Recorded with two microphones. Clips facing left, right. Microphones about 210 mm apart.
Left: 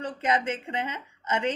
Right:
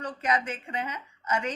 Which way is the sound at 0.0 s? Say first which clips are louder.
Left 2 dB; 25° left (ahead or behind).